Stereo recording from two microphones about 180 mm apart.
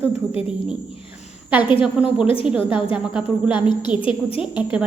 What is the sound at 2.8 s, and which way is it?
A woman's voice, 30° left (ahead or behind).